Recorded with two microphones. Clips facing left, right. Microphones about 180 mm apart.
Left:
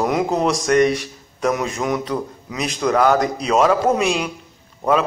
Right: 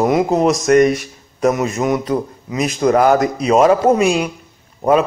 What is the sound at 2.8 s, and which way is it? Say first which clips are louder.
Speech: right 4 dB; 45° right (ahead or behind).